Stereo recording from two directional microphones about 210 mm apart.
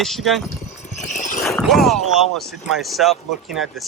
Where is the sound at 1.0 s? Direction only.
35° left (ahead or behind).